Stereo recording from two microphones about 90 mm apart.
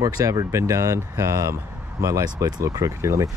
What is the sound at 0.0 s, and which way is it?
Speech, 40° right (ahead or behind).